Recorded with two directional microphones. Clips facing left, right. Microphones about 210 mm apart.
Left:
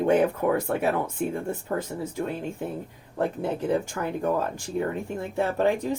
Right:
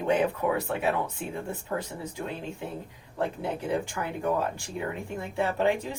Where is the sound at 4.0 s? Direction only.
40° left (ahead or behind).